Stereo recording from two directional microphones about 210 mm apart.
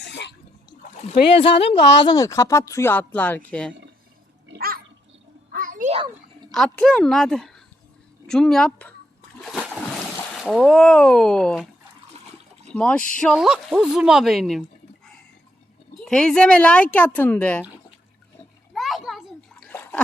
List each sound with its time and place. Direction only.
0.0 s water: 55° left (ahead or behind)
1.4 s a woman's voice: 25° left (ahead or behind)
1.7 s speech: 55° left (ahead or behind)
2.0 s a woman's voice: 20° left (ahead or behind)
4.4 s a sound: 50° right (ahead or behind)
6.5 s speech: centre (ahead or behind)
9.4 s splash: centre (ahead or behind)
12.1 s water: 30° right (ahead or behind)
12.7 s speech: 5° left (ahead or behind)
16.0 s speech: 5° left (ahead or behind)
18.7 s splash: centre (ahead or behind)